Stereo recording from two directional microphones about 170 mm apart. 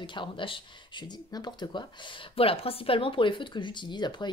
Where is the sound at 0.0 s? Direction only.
30° left (ahead or behind).